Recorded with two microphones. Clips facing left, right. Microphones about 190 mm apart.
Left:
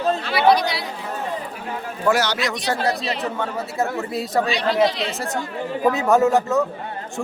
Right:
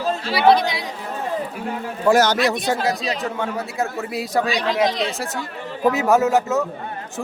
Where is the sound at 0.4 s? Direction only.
20° right (ahead or behind).